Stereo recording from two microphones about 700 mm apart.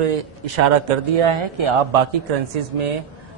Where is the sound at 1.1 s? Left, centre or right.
Right.